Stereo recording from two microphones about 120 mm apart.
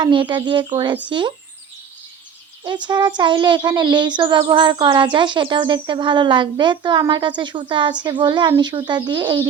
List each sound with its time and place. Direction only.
0.0 s speech: 40° right (ahead or behind)
2.6 s speech: 40° right (ahead or behind)